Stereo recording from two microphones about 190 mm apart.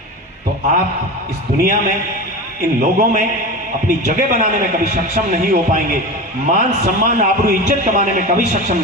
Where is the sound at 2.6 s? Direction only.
45° right (ahead or behind).